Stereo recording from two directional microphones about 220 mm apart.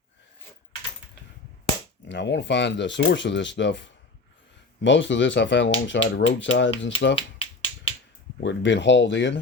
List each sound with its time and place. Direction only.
2.0 s speech: 55° left (ahead or behind)
7.2 s finger snapping: 25° left (ahead or behind)
8.4 s speech: 55° left (ahead or behind)